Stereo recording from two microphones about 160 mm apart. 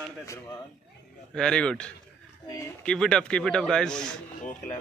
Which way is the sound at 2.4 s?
20° left (ahead or behind).